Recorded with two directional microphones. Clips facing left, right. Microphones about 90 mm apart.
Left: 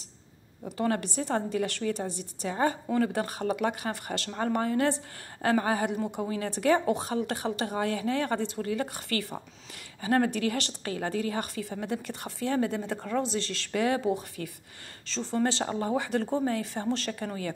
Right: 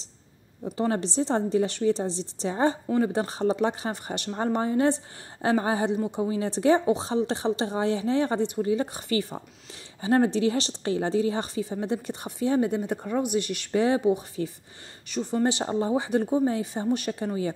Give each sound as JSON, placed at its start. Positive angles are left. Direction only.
{"t": 0.7, "sound": "a woman's voice", "side_deg": -25}